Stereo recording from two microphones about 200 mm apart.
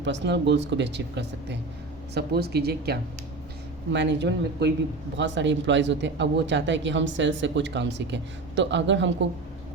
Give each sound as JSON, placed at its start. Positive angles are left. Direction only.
{"t": 0.0, "sound": "speech", "side_deg": -60}